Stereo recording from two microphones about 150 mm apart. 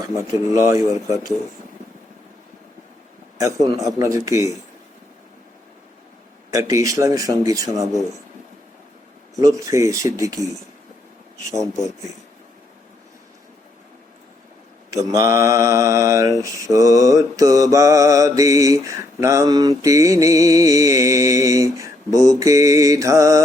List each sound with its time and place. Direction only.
0.2 s mantra: 20° right (ahead or behind)
3.3 s mantra: 20° right (ahead or behind)
6.5 s mantra: 20° right (ahead or behind)
9.4 s mantra: 20° right (ahead or behind)
14.8 s mantra: 20° right (ahead or behind)